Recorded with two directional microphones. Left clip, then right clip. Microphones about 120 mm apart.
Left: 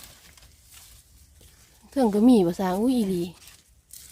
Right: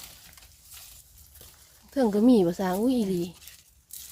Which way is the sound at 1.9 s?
30° left (ahead or behind).